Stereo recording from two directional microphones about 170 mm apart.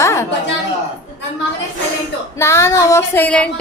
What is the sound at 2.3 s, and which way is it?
A woman's voice, 15° left (ahead or behind).